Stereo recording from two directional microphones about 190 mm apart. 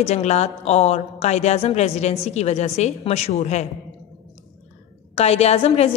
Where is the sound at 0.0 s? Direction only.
35° left (ahead or behind).